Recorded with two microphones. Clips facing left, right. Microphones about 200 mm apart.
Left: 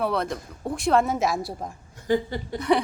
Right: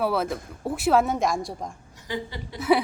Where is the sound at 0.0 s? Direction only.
5° right (ahead or behind).